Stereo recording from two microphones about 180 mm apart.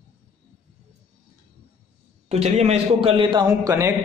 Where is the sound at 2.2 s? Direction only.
35° right (ahead or behind).